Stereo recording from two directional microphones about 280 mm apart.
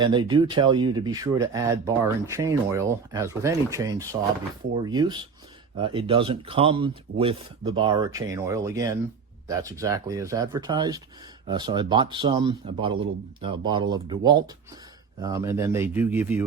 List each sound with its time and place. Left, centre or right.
0.0 s speech: centre